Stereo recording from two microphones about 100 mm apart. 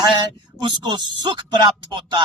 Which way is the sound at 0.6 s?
45° right (ahead or behind).